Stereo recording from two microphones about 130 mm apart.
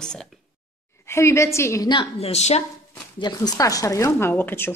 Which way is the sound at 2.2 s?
55° left (ahead or behind).